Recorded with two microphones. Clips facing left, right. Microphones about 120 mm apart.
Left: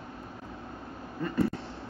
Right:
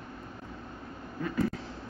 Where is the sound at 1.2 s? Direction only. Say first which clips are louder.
Left 2 dB; centre (ahead or behind).